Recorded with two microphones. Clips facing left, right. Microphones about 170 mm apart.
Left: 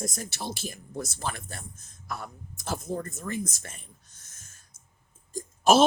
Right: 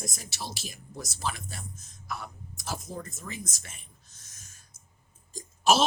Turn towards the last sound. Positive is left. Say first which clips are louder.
# left 4 dB
turn(degrees=50)  # may be behind; listen again after turning